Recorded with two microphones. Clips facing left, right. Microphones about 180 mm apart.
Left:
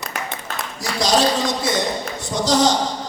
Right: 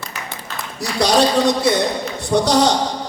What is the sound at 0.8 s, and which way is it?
Speech, 60° right (ahead or behind).